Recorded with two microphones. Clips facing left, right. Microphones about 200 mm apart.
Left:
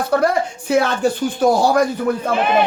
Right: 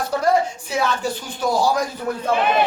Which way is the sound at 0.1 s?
60° left (ahead or behind).